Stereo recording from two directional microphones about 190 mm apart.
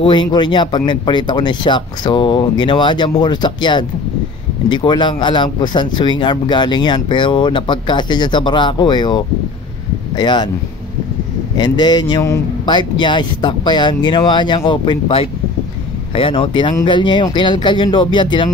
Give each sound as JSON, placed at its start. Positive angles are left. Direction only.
{"t": 0.0, "sound": "speech", "side_deg": 25}
{"t": 11.5, "sound": "speech", "side_deg": 20}